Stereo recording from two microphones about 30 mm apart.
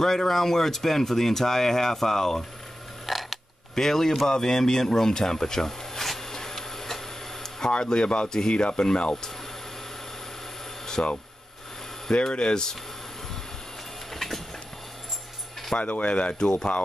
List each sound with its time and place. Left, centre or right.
0.0 s speech: centre
3.1 s a sound: centre
3.7 s speech: centre
7.8 s speech: left
11.0 s speech: left
14.1 s a sound: centre
15.8 s speech: left
16.3 s speech: left